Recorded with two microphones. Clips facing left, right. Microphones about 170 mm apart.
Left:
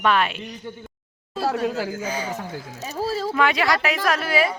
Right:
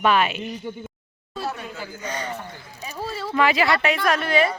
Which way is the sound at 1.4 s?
90° left.